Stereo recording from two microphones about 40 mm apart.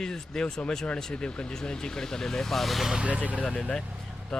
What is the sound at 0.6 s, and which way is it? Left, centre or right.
Speech, left.